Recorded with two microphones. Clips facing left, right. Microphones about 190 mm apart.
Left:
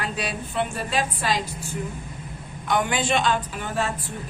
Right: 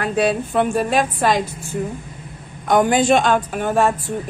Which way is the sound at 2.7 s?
45° right (ahead or behind).